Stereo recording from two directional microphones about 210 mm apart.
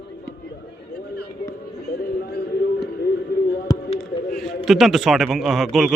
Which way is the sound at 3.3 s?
50° left (ahead or behind).